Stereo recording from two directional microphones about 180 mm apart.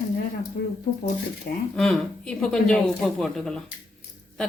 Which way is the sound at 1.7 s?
5° left (ahead or behind).